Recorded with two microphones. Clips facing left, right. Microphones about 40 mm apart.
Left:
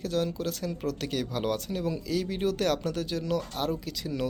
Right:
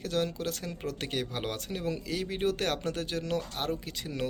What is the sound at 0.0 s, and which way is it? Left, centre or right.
Speech, right.